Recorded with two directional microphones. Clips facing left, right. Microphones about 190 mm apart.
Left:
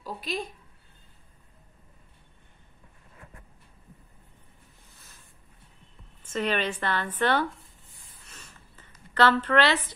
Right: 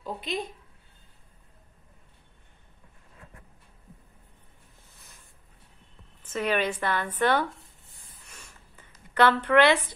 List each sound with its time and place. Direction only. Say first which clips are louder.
0.0 s a woman's voice: right 1 dB; 20° right (ahead or behind)
6.3 s a woman's voice: right 1 dB; 10° right (ahead or behind)
8.3 s a sound: left 1 dB; 10° right (ahead or behind)